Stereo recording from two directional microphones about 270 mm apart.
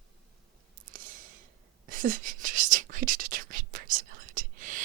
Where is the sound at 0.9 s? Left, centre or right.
Right.